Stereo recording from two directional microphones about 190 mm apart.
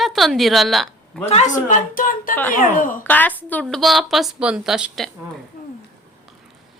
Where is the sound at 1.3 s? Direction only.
40° left (ahead or behind).